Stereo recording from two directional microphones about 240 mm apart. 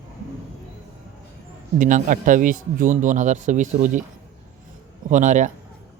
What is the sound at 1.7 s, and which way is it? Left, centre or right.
A man's voice, right.